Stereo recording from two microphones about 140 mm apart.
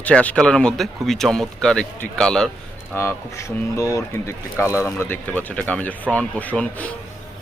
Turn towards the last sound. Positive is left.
turn(degrees=10)  # may be behind; listen again after turning